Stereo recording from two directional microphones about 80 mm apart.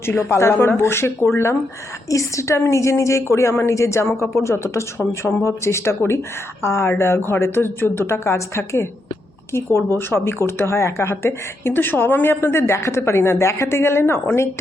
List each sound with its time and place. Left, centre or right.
0.0 s a woman's voice: left